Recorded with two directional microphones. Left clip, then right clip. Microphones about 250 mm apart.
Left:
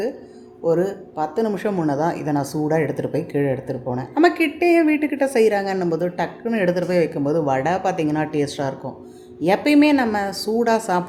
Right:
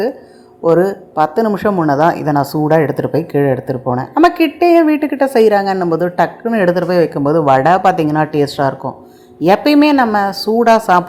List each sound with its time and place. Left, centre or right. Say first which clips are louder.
0.6 s a woman's voice: right 8 dB; centre